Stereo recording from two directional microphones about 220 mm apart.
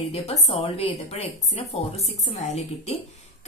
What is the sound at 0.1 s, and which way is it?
A woman's voice, 30° left (ahead or behind).